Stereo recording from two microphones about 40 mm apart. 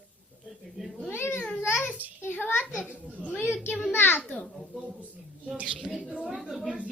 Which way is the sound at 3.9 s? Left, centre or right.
Left.